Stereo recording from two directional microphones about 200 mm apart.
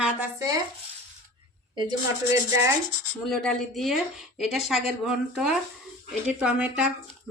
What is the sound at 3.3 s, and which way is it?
Speech, centre (ahead or behind).